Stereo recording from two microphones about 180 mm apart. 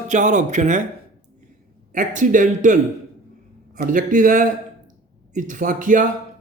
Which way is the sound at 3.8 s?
50° right (ahead or behind).